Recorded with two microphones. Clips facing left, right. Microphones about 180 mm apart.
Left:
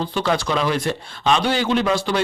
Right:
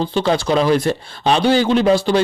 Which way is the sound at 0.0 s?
30° right (ahead or behind).